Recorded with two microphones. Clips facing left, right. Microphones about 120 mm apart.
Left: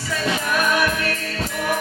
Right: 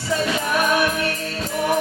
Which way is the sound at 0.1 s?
25° right (ahead or behind).